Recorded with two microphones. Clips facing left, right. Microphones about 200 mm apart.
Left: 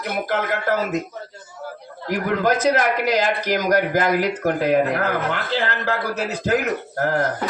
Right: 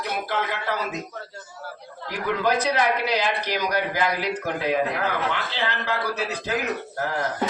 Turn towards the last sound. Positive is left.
turn(degrees=55)  # may be behind; listen again after turning